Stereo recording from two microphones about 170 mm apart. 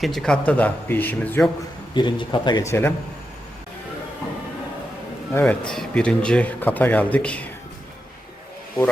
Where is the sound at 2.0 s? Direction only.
25° left (ahead or behind).